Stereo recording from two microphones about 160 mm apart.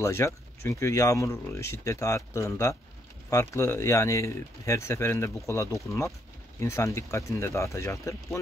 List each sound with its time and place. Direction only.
0.0 s speech: 20° left (ahead or behind)